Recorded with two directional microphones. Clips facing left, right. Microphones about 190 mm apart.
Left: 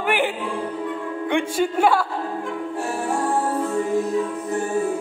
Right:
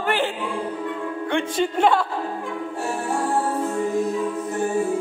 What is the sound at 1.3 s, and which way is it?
Music, 5° left (ahead or behind).